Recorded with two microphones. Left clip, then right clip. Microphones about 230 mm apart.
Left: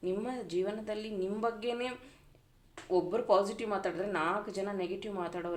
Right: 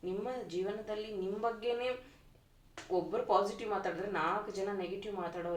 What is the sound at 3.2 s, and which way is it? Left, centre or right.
Speech, left.